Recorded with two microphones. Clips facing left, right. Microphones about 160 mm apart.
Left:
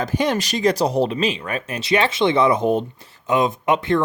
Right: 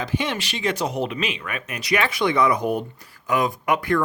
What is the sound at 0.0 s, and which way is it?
Speech, 40° left (ahead or behind).